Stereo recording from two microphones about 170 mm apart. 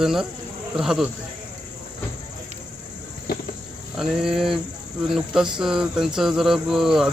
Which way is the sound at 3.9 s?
5° right (ahead or behind).